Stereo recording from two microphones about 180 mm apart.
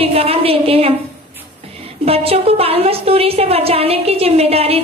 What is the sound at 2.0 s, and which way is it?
A woman's voice, 35° right (ahead or behind).